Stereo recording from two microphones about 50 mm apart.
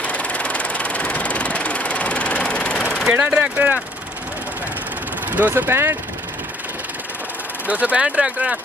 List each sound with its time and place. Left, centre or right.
0.0 s vehicle: left
3.1 s speech: right
5.5 s speech: right
7.6 s speech: right